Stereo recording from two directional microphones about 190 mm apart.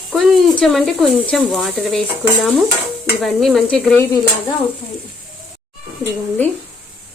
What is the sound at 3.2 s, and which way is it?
Speech, centre (ahead or behind).